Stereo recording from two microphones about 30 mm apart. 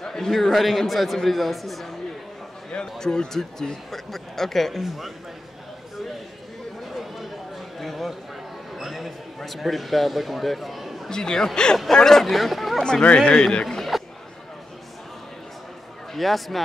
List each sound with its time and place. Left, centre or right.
0.0 s a sound: centre
0.4 s a man's voice: centre
3.0 s speech: centre
4.8 s a man's voice: centre
7.8 s a sound: centre
8.7 s a man's voice: centre
11.1 s speech: left
12.3 s speech: centre
13.2 s speech: left
13.9 s a sound: centre
16.1 s a man's voice: centre